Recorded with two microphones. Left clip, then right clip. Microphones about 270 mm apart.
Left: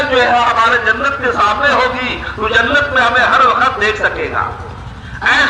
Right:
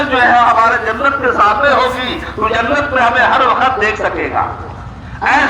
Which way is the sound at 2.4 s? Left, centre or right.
Left.